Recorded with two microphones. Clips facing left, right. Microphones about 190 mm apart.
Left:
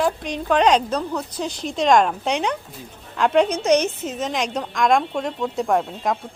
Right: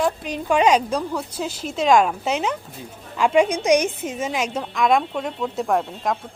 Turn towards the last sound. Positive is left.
turn(degrees=0)  # may be behind; listen again after turning